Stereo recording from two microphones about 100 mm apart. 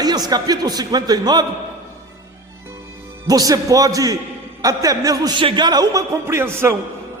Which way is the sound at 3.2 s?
40° right (ahead or behind).